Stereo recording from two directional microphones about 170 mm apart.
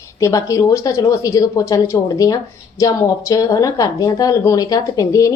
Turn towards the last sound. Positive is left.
turn(degrees=20)  # may be behind; listen again after turning